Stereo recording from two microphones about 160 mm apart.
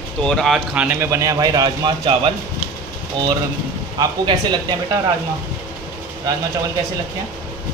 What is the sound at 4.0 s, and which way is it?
Speech, 30° right (ahead or behind).